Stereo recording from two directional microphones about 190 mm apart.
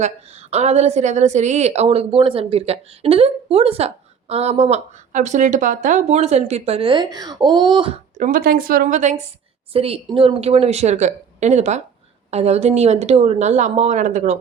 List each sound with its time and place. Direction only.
0.0 s a woman's voice: 35° right (ahead or behind)
8.2 s a woman's voice: 45° right (ahead or behind)